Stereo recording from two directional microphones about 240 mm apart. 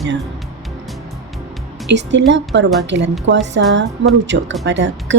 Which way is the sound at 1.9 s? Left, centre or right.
Right.